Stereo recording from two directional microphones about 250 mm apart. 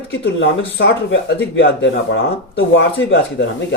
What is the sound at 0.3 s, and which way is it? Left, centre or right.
Speech, left.